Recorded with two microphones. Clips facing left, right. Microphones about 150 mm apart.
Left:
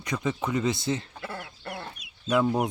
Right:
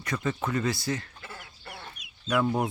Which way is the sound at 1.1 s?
60° left (ahead or behind).